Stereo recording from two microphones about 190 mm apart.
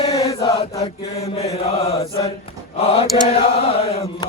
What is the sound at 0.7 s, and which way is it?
Mantra, 35° left (ahead or behind).